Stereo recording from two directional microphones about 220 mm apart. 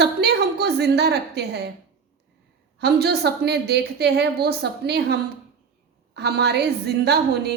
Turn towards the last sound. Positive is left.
turn(degrees=-45)  # may be behind; listen again after turning